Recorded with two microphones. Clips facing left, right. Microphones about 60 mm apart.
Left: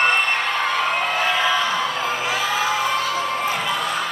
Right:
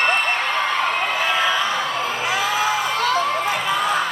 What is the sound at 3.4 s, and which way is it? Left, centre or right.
Crowd, right.